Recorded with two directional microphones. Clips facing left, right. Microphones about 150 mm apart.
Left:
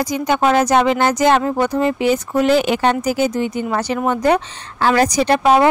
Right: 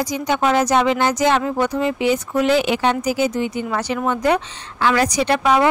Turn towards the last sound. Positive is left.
turn(degrees=35)  # may be behind; listen again after turning